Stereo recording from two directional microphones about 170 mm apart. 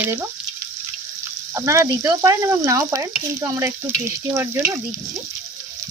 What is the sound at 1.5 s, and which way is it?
Frying, 15° right (ahead or behind).